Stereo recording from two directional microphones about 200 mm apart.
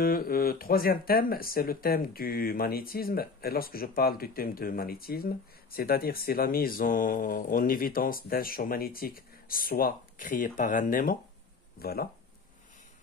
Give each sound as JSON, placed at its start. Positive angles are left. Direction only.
{"t": 0.0, "sound": "speech", "side_deg": 45}